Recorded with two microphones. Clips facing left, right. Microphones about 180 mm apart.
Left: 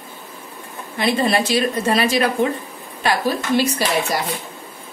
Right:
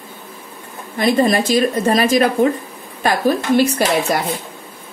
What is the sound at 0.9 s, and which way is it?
Speech, 45° right (ahead or behind).